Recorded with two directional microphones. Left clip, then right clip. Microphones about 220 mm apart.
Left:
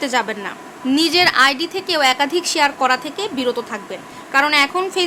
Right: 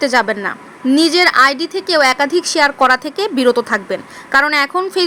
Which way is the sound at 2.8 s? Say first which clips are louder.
Right 5 dB; 30° right (ahead or behind).